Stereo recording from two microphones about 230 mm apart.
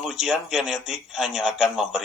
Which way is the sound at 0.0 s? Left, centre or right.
Centre.